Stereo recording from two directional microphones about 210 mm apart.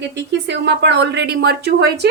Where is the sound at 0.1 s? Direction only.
55° right (ahead or behind).